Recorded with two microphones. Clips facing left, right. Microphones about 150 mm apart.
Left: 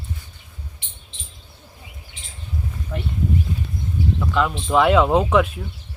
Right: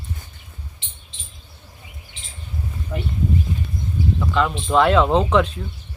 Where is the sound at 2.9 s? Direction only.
5° right (ahead or behind).